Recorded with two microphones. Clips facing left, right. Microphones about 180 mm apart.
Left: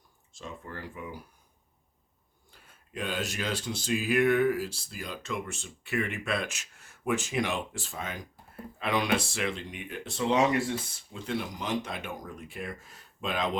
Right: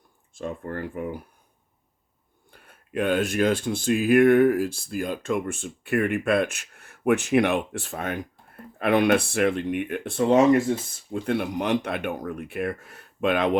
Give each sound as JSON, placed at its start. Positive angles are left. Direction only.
{"t": 0.3, "sound": "speech", "side_deg": -55}
{"t": 2.5, "sound": "speech", "side_deg": -60}